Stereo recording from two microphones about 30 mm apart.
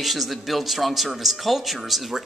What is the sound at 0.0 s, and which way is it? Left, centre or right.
Speech, centre.